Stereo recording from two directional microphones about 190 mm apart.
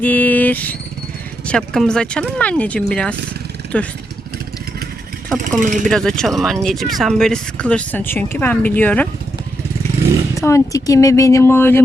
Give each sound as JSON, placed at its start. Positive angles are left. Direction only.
{"t": 0.0, "sound": "vehicle", "side_deg": 10}
{"t": 1.5, "sound": "speech", "side_deg": 5}
{"t": 5.5, "sound": "speech", "side_deg": -40}
{"t": 5.8, "sound": "speech", "side_deg": 0}
{"t": 10.3, "sound": "speech", "side_deg": 15}